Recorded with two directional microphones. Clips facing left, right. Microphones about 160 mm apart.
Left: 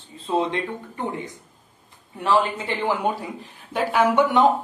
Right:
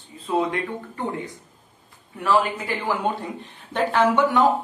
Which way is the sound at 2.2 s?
20° left (ahead or behind).